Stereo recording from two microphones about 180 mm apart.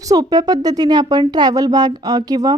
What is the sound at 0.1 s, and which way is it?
A woman's voice, 20° right (ahead or behind).